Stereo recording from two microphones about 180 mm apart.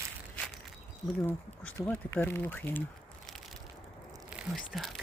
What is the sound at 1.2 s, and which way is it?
Speech, 10° left (ahead or behind).